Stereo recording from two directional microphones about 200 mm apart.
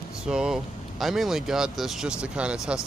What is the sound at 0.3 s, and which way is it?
Speech, 5° right (ahead or behind).